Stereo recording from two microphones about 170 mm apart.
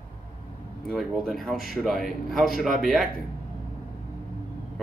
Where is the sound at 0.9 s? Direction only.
Centre (ahead or behind).